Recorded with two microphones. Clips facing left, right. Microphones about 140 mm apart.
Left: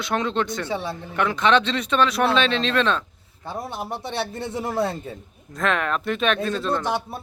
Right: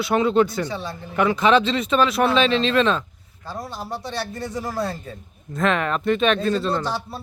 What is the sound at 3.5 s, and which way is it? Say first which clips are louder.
A man's voice: left 1 dB; 25° left (ahead or behind).